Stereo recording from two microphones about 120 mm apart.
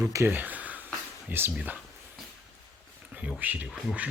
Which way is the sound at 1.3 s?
15° right (ahead or behind).